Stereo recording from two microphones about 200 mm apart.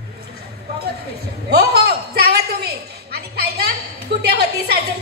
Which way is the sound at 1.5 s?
55° right (ahead or behind).